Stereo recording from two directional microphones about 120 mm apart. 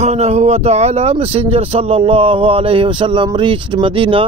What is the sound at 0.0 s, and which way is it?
Speech, 65° right (ahead or behind).